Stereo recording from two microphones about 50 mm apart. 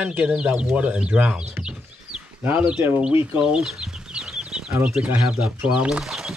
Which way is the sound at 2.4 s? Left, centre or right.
Right.